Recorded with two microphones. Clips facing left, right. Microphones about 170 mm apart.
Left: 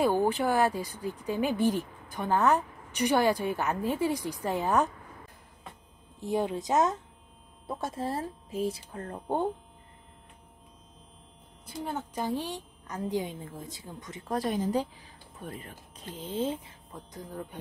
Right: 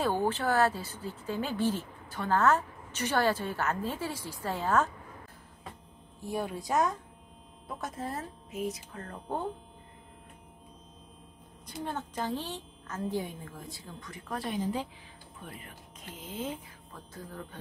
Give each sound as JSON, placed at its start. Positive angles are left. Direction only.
{"t": 0.0, "sound": "speech", "side_deg": 15}
{"t": 6.2, "sound": "speech", "side_deg": 20}
{"t": 11.6, "sound": "speech", "side_deg": 10}
{"t": 14.3, "sound": "speech", "side_deg": 40}
{"t": 16.9, "sound": "speech", "side_deg": 20}